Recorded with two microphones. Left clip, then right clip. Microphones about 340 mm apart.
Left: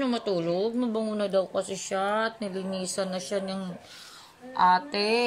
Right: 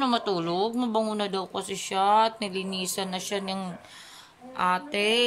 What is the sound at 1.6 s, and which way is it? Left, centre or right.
Speech, right.